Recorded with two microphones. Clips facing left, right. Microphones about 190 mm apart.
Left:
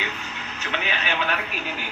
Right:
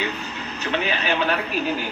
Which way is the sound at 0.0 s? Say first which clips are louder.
Right 5 dB; 35° right (ahead or behind).